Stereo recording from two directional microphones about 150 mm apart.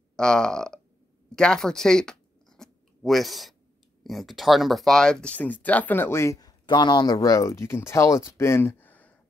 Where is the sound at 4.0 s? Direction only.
Centre (ahead or behind).